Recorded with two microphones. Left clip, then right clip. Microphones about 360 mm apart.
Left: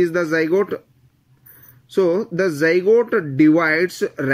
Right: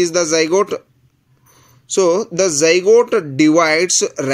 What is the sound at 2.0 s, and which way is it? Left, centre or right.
Speech, right.